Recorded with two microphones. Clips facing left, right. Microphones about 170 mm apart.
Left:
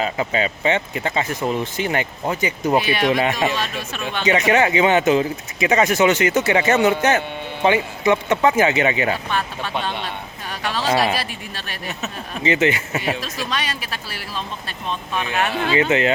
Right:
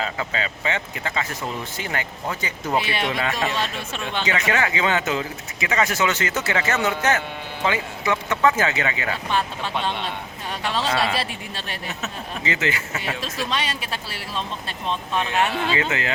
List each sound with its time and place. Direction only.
0.0 s speech: 20° left (ahead or behind)
2.8 s speech: 25° right (ahead or behind)
3.1 s speech: 20° left (ahead or behind)
10.5 s speech: 25° right (ahead or behind)
10.8 s speech: 25° left (ahead or behind)
11.1 s speech: 25° right (ahead or behind)
12.4 s speech: 20° left (ahead or behind)
13.5 s speech: 25° right (ahead or behind)
15.1 s speech: 5° left (ahead or behind)
15.7 s speech: 20° left (ahead or behind)